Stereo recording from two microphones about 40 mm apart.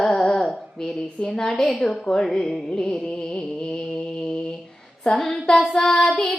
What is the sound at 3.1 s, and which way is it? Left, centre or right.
Music, left.